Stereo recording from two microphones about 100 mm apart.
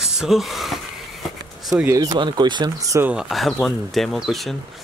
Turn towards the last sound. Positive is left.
turn(degrees=0)  # may be behind; listen again after turning